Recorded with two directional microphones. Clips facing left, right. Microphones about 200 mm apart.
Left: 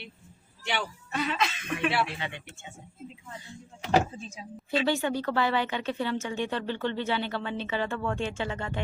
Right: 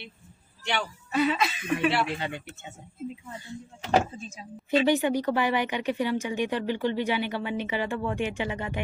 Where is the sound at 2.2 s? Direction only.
40° right (ahead or behind).